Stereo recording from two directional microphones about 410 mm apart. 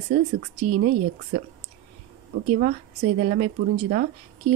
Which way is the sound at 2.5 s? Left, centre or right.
Centre.